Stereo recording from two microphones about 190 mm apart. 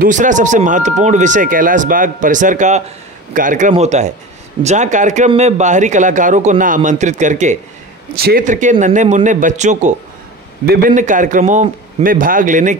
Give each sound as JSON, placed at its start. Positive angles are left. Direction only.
{"t": 0.0, "sound": "speech", "side_deg": -40}
{"t": 8.2, "sound": "speech", "side_deg": -50}
{"t": 10.6, "sound": "a man's voice", "side_deg": -50}